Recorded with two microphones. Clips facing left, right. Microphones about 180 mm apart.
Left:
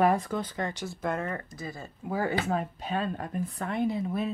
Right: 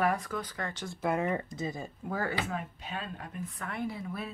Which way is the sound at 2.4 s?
40° left (ahead or behind).